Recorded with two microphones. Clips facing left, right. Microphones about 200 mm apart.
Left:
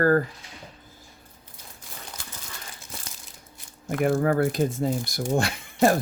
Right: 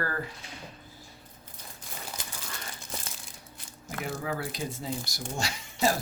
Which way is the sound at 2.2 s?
20° right (ahead or behind).